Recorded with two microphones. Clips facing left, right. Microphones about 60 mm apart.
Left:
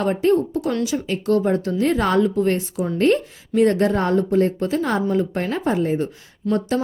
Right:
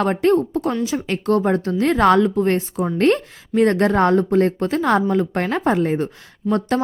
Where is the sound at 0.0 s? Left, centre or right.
Right.